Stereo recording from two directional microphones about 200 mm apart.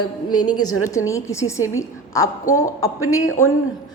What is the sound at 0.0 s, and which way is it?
A woman's voice, 20° left (ahead or behind).